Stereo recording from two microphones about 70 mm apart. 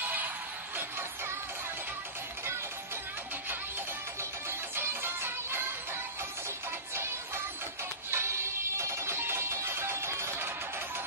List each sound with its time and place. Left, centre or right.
0.0 s music: right
4.2 s music: right
8.1 s music: right